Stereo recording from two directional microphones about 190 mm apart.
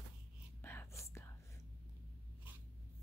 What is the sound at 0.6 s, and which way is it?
Whispering, 10° left (ahead or behind).